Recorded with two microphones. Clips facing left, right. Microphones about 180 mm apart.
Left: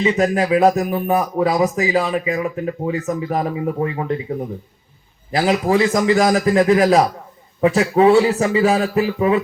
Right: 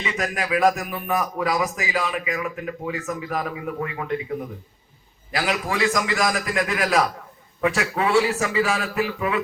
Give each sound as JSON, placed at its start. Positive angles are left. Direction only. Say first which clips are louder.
{"t": 0.0, "sound": "speech", "louder": "left 10 dB", "side_deg": 30}
{"t": 5.3, "sound": "speech", "louder": "left 9 dB", "side_deg": 35}